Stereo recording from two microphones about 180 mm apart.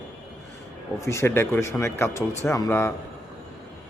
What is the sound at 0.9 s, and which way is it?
A man's voice, 15° left (ahead or behind).